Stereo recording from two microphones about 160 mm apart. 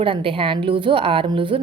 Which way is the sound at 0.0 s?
35° right (ahead or behind).